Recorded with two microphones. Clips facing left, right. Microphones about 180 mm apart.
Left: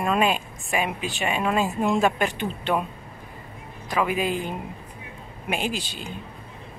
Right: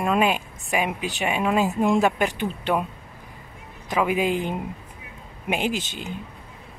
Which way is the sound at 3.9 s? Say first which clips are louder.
Right 2 dB; 20° right (ahead or behind).